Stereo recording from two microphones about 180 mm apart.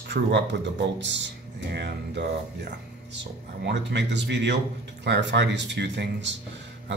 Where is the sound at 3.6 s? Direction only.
75° right (ahead or behind).